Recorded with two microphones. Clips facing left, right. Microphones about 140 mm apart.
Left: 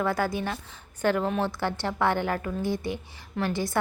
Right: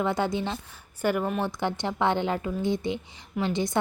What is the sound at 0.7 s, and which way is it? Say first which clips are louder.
A woman's voice: left 2 dB; 10° right (ahead or behind).